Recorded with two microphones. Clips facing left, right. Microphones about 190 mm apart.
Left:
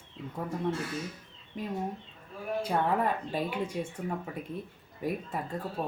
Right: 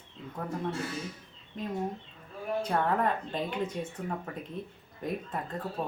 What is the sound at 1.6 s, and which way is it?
Speech, 10° left (ahead or behind).